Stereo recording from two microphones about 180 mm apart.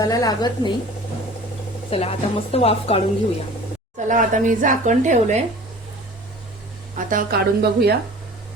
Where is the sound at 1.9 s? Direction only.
35° left (ahead or behind).